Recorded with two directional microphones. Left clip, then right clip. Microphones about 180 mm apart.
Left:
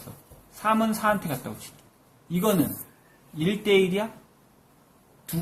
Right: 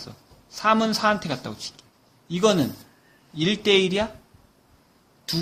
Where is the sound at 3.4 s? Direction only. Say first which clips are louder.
Right 2 dB; 55° right (ahead or behind).